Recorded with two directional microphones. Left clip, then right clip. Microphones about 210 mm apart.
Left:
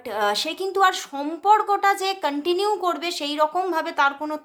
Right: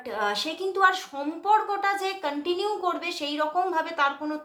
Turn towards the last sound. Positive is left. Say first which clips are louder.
# left 4 dB
turn(degrees=50)  # may be behind; listen again after turning